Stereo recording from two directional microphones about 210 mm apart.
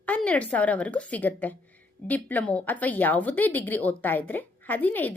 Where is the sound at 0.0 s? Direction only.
5° left (ahead or behind).